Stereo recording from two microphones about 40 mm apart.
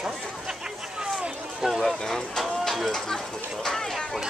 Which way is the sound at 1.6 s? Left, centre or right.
Centre.